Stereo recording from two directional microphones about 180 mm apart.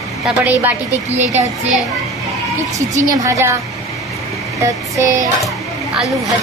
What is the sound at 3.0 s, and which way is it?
Vehicle, 20° right (ahead or behind).